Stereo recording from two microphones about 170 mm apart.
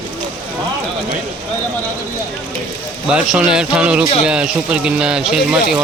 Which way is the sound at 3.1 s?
5° right (ahead or behind).